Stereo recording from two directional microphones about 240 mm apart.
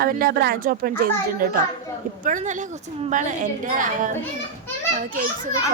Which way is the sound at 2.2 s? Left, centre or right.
Right.